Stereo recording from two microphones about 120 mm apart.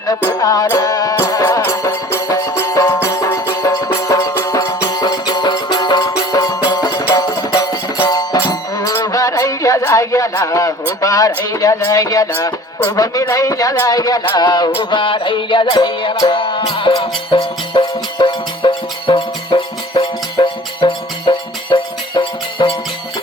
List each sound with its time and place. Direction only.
0.3 s music: 30° left (ahead or behind)
8.9 s a man's voice: 25° left (ahead or behind)
14.8 s music: 45° left (ahead or behind)